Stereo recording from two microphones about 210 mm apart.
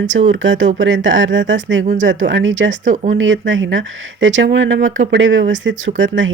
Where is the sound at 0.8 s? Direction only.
60° right (ahead or behind).